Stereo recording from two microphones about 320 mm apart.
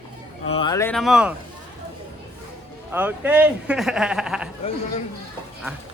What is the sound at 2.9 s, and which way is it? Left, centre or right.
Speech, centre.